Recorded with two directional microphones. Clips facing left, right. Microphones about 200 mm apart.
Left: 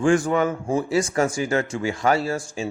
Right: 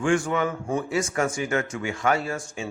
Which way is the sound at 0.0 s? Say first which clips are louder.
Left 4 dB; 35° left (ahead or behind).